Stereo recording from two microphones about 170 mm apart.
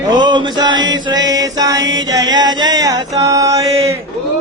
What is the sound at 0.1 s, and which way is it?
Chant, 25° right (ahead or behind).